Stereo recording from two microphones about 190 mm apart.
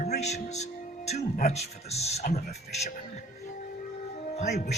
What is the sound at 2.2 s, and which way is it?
Speech, 50° left (ahead or behind).